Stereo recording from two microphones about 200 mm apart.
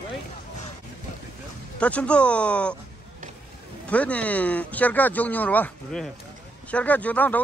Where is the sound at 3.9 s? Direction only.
5° left (ahead or behind).